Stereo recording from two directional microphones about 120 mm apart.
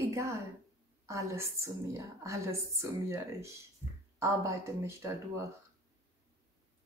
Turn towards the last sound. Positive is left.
turn(degrees=-25)  # may be behind; listen again after turning